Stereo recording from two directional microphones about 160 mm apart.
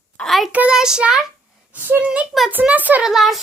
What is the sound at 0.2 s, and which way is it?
Speech, centre (ahead or behind).